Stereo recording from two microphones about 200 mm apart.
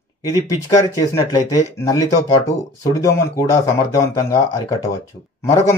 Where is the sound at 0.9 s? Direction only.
15° left (ahead or behind).